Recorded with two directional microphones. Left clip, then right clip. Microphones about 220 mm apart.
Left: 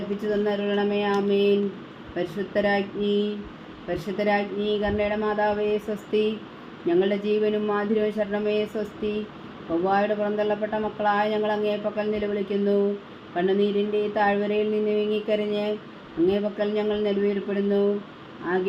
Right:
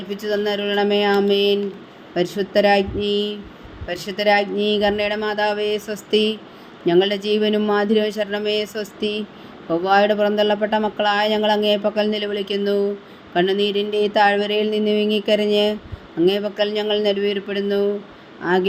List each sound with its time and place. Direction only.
0.3 s speech: 45° right (ahead or behind)